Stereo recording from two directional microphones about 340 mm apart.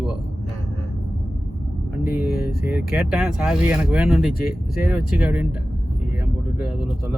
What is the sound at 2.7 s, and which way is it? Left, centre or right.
Speech, centre.